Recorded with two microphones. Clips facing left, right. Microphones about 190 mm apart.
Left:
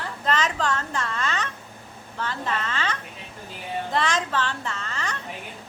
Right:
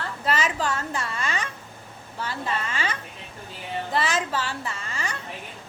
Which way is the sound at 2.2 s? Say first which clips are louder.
Left 1 dB; 10° right (ahead or behind).